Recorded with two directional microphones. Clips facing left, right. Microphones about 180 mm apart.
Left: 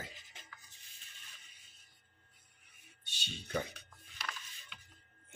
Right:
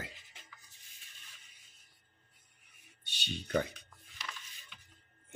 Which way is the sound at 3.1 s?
70° right (ahead or behind).